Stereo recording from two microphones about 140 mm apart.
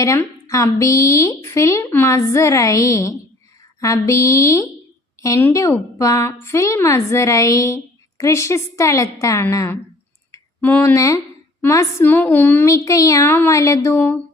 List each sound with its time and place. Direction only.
0.0 s speech: 20° left (ahead or behind)